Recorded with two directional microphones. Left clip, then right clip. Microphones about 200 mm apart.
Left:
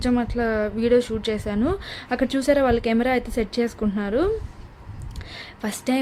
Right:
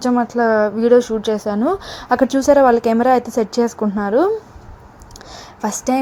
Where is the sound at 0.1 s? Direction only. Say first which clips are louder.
Right 9 dB; 5° left (ahead or behind).